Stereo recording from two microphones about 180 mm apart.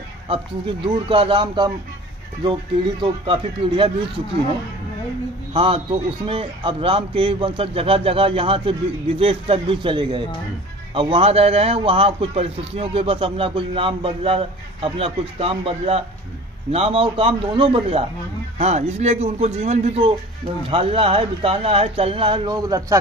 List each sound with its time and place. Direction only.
0.3 s speech: 30° right (ahead or behind)
5.5 s a man's voice: 30° right (ahead or behind)